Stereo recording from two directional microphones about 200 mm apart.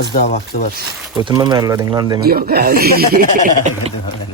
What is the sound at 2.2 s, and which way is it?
Speech, 50° right (ahead or behind).